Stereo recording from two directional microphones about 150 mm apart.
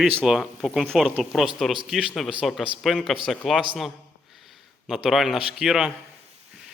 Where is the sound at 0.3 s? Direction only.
Centre (ahead or behind).